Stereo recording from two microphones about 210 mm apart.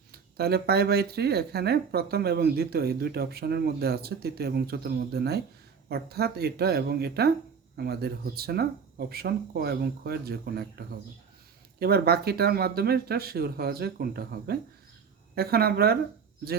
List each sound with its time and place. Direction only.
0.1 s speech: 50° right (ahead or behind)